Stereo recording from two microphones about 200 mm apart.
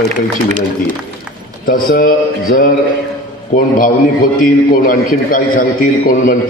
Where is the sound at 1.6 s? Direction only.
45° left (ahead or behind).